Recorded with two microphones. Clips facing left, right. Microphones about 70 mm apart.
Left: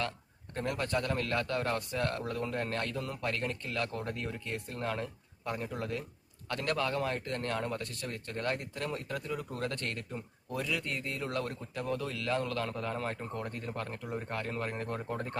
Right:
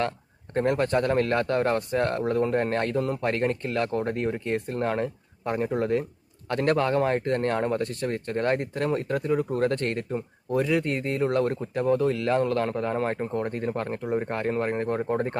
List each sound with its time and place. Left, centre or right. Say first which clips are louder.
0.5 s speech: right 10 dB; right